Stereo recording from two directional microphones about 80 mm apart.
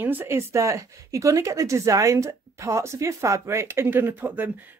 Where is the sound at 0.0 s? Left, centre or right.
Right.